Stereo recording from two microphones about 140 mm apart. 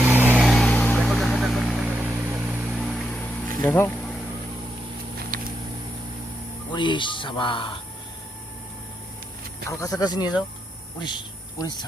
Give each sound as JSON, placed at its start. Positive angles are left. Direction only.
{"t": 0.0, "sound": "vehicle", "side_deg": -10}
{"t": 0.3, "sound": "vehicle", "side_deg": 0}
{"t": 3.6, "sound": "speech", "side_deg": 20}
{"t": 5.3, "sound": "vehicle", "side_deg": -90}
{"t": 6.7, "sound": "speech", "side_deg": 35}
{"t": 9.6, "sound": "speech", "side_deg": 25}